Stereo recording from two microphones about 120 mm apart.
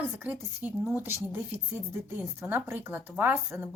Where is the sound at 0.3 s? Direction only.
15° right (ahead or behind).